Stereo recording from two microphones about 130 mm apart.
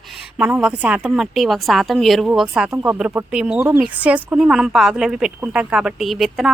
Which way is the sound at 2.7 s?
15° right (ahead or behind).